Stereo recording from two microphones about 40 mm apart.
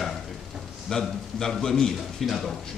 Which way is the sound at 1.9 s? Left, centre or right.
Centre.